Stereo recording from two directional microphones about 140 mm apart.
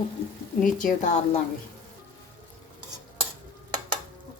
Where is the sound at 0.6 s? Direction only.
70° left (ahead or behind).